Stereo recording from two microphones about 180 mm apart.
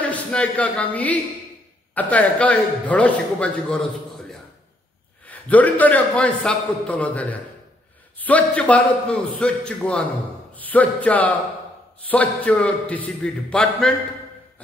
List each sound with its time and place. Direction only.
0.0 s a woman's voice: 5° left (ahead or behind)